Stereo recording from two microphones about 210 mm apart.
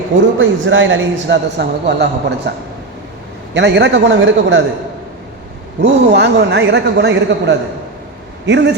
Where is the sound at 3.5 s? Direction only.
55° right (ahead or behind).